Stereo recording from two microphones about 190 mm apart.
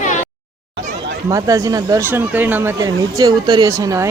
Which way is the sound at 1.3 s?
20° right (ahead or behind).